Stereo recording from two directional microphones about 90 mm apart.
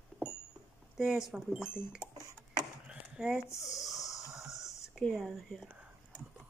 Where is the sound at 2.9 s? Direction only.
10° right (ahead or behind).